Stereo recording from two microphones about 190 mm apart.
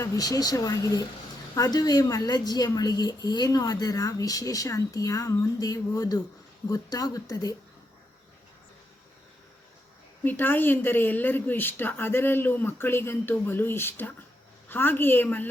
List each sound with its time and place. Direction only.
0.0 s a woman's voice: 20° left (ahead or behind)
10.2 s speech: 10° left (ahead or behind)